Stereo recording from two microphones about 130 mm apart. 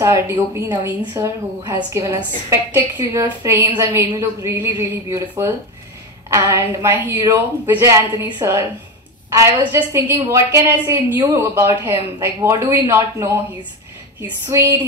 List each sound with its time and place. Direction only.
0.0 s a woman's voice: 20° right (ahead or behind)
14.5 s a woman's voice: 20° right (ahead or behind)